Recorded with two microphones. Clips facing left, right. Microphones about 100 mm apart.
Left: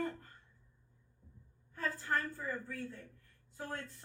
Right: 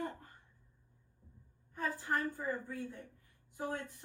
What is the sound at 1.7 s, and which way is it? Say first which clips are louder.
A woman's voice: even; 15° right (ahead or behind).